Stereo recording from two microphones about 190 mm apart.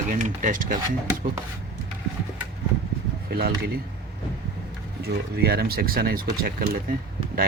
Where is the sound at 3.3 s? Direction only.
55° right (ahead or behind).